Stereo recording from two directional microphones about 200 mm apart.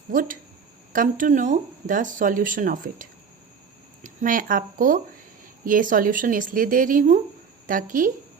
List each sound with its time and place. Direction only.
0.1 s a woman's voice: 45° right (ahead or behind)